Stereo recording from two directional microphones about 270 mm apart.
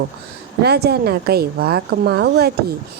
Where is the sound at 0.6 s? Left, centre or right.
Right.